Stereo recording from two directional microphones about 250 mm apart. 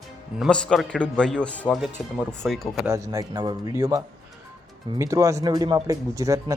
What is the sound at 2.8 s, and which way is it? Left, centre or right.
Speech, centre.